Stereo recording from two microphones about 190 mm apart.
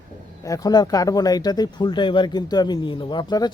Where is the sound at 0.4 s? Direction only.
20° left (ahead or behind).